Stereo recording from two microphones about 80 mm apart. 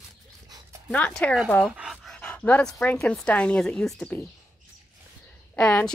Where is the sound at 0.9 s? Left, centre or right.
Centre.